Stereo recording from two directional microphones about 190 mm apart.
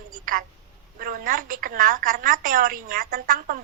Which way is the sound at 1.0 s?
45° right (ahead or behind).